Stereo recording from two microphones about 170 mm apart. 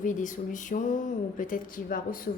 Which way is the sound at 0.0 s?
50° left (ahead or behind).